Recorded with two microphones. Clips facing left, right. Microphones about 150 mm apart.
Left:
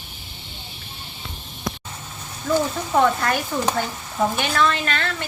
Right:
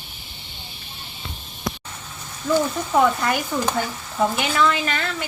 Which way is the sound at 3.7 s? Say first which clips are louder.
Left 1 dB; 15° left (ahead or behind).